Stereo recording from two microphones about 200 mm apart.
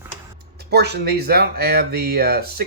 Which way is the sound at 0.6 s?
55° right (ahead or behind).